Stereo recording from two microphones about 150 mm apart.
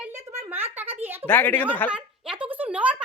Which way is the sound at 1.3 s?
10° left (ahead or behind).